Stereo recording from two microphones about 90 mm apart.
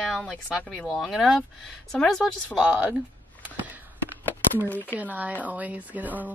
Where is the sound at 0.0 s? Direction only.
10° left (ahead or behind).